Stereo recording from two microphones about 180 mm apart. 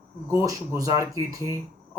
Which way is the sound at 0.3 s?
15° right (ahead or behind).